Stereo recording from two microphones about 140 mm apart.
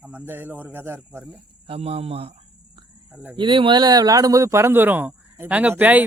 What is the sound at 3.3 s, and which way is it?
Speech, 35° right (ahead or behind).